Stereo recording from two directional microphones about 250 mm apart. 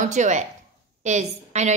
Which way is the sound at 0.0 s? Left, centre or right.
Right.